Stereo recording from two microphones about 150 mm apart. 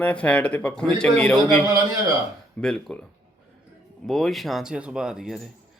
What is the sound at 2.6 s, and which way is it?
Speech, 5° left (ahead or behind).